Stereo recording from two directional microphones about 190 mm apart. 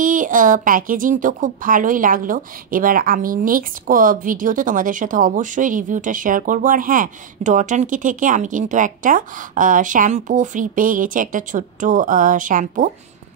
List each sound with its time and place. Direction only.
0.0 s a woman's voice: 45° right (ahead or behind)